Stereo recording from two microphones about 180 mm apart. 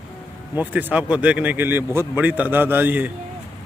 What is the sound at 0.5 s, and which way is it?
Speech, 10° right (ahead or behind).